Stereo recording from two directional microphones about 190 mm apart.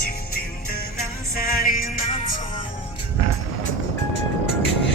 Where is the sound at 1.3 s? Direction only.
50° left (ahead or behind).